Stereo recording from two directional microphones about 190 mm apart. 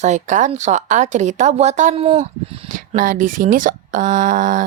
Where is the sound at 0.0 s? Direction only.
40° right (ahead or behind).